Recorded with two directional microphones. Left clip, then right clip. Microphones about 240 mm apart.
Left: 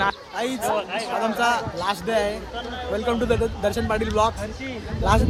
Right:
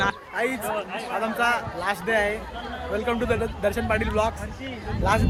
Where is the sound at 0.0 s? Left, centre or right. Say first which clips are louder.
Left 1 dB; centre.